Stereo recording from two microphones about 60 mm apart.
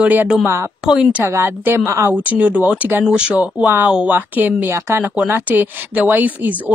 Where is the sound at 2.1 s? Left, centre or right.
Right.